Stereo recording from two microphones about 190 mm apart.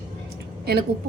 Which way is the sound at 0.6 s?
55° right (ahead or behind).